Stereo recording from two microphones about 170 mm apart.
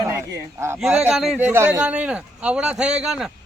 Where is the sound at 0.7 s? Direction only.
5° right (ahead or behind).